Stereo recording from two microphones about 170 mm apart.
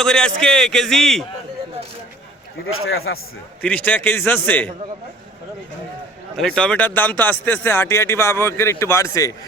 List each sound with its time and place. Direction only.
0.0 s speech: 5° left (ahead or behind)
3.1 s a man's voice: 90° left
3.6 s speech: 5° left (ahead or behind)
6.3 s speech: 5° left (ahead or behind)